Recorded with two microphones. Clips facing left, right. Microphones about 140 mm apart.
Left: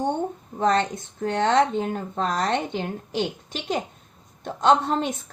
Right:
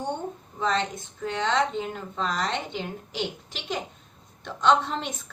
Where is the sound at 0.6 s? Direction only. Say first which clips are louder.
Left 5 dB; 55° left (ahead or behind).